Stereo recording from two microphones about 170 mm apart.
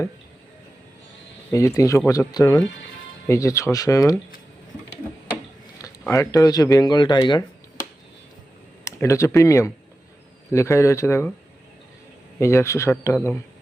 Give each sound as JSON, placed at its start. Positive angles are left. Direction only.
{"t": 1.5, "sound": "speech", "side_deg": 15}
{"t": 5.8, "sound": "speech", "side_deg": 20}
{"t": 12.4, "sound": "speech", "side_deg": 15}